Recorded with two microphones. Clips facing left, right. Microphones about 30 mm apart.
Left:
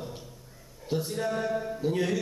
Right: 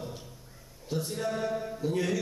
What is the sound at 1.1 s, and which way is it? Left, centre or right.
A man's voice, centre.